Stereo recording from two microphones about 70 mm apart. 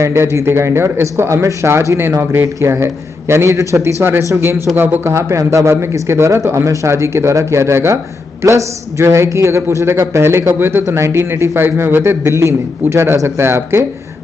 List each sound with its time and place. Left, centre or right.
0.0 s a man's voice: right